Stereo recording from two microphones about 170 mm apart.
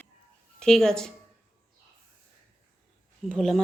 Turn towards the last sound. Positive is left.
turn(degrees=5)  # may be behind; listen again after turning